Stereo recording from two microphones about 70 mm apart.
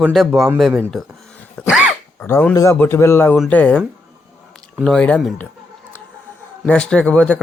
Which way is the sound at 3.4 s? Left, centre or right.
Centre.